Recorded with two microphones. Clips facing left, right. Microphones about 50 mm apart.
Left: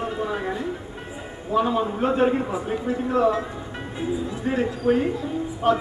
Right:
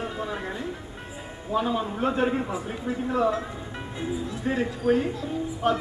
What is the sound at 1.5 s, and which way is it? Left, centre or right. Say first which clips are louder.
A man's voice: left 4 dB; centre.